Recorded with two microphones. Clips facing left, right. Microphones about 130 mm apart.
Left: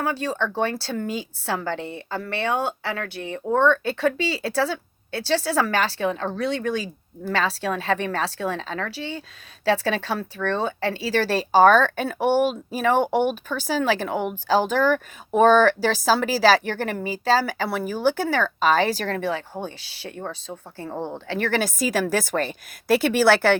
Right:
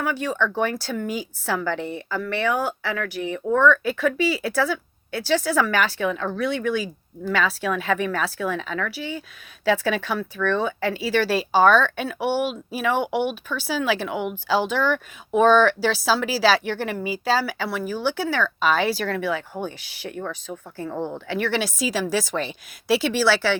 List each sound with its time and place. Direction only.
0.0 s speech: 30° left (ahead or behind); by 23.6 s 55° left (ahead or behind)